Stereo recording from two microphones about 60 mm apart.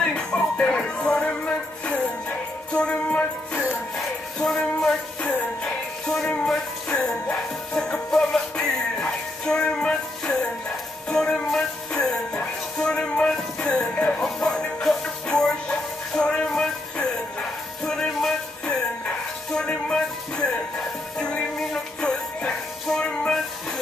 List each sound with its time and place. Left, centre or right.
0.0 s music: centre
4.6 s music: centre
11.1 s music: centre
17.8 s music: centre